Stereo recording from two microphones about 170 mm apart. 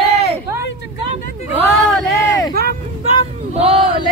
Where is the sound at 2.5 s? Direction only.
65° right (ahead or behind).